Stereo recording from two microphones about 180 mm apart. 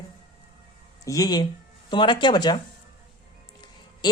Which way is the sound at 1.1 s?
20° left (ahead or behind).